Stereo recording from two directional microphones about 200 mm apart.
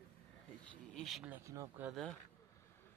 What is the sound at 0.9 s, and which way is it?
Speech, centre (ahead or behind).